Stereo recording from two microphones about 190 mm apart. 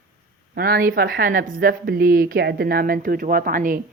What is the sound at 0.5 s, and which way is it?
Speech, 50° right (ahead or behind).